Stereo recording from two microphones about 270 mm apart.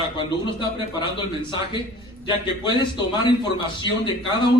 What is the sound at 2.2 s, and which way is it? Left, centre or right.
A man's voice, centre.